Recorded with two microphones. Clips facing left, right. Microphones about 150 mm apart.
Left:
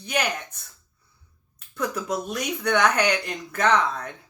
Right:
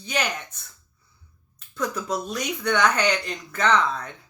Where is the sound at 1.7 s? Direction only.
55° left (ahead or behind).